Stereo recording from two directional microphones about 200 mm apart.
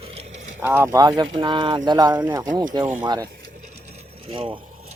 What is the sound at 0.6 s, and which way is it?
Speech, 10° right (ahead or behind).